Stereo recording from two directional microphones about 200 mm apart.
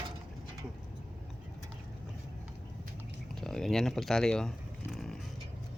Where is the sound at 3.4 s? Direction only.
Centre (ahead or behind).